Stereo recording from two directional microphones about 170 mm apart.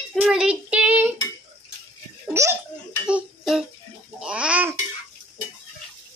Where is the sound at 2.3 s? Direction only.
15° right (ahead or behind).